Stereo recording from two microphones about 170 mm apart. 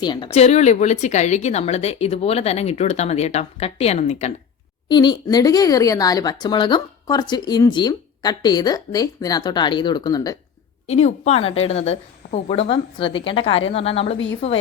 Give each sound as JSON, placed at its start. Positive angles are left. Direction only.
{"t": 0.0, "sound": "speech", "side_deg": 25}
{"t": 0.3, "sound": "a woman's voice", "side_deg": 40}
{"t": 4.9, "sound": "speech", "side_deg": 25}
{"t": 10.8, "sound": "a woman's voice", "side_deg": 40}